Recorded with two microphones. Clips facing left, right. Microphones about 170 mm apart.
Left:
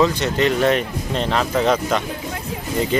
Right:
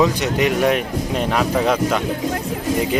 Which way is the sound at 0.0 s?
10° right (ahead or behind).